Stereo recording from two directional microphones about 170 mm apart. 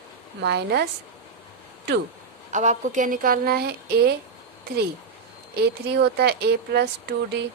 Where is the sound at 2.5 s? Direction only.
45° right (ahead or behind); by 4.2 s 70° right (ahead or behind).